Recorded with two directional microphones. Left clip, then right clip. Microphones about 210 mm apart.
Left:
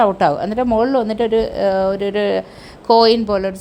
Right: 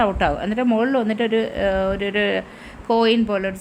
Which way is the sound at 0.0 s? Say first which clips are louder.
Left 5 dB; 15° left (ahead or behind).